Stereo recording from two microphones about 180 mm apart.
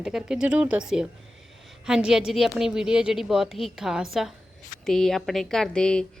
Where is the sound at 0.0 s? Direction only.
5° right (ahead or behind).